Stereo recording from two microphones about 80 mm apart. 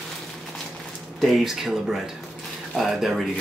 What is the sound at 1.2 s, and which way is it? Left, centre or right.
Speech, centre.